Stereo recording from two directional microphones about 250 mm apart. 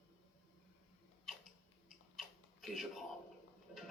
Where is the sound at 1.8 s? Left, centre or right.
Centre.